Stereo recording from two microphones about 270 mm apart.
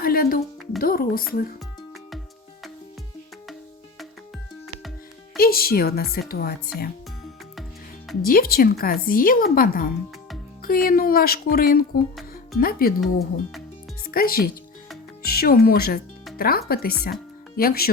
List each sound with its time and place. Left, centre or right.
0.0 s music: left
0.8 s speech: left
5.4 s speech: left
8.2 s speech: left
14.1 s speech: left